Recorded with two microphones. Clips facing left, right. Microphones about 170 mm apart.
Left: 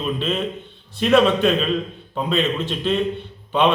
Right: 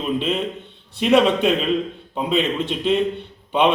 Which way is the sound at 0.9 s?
20° right (ahead or behind).